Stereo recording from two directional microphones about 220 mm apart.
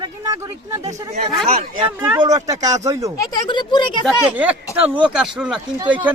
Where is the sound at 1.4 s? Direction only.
30° right (ahead or behind).